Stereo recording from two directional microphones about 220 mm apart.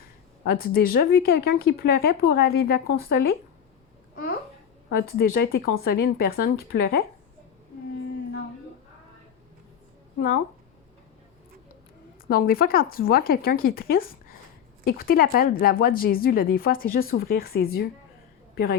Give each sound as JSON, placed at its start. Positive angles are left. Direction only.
{"t": 0.4, "sound": "speech", "side_deg": 45}
{"t": 4.9, "sound": "speech", "side_deg": 45}
{"t": 10.2, "sound": "a woman's voice", "side_deg": 40}
{"t": 12.3, "sound": "a woman's voice", "side_deg": 40}